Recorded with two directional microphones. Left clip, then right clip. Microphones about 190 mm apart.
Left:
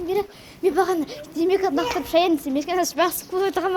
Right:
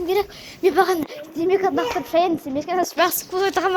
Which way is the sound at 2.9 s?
35° left (ahead or behind).